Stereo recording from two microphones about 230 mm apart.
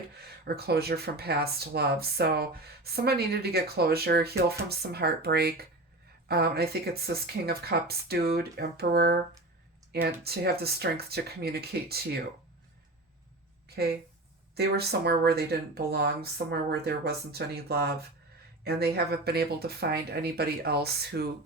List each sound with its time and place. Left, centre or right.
0.4 s speech: right
14.5 s speech: right